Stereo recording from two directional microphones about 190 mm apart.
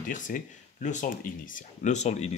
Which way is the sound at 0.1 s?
45° left (ahead or behind).